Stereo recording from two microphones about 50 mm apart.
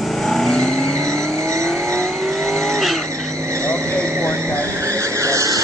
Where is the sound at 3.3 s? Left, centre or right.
Right.